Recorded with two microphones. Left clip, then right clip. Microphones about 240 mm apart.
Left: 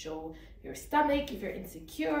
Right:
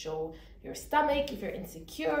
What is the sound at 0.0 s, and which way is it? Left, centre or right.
Speech, centre.